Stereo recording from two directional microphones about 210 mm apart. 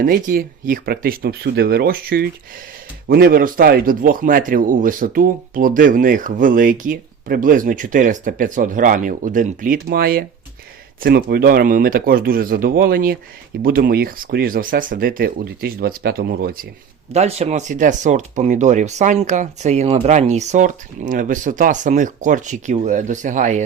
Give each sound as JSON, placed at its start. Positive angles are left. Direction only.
{"t": 0.0, "sound": "speech", "side_deg": -45}
{"t": 17.1, "sound": "speech", "side_deg": -30}